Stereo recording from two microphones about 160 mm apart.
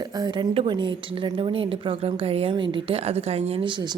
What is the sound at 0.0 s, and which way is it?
A woman's voice, 25° right (ahead or behind).